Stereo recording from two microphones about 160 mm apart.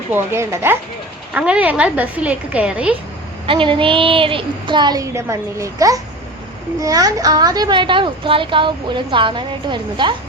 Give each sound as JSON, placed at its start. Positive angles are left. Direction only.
{"t": 0.1, "sound": "a woman's voice", "side_deg": -15}
{"t": 3.4, "sound": "a woman's voice", "side_deg": -30}